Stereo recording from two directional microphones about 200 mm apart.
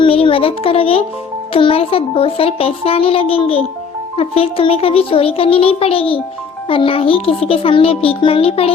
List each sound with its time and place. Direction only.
0.0 s a child's voice: 25° left (ahead or behind)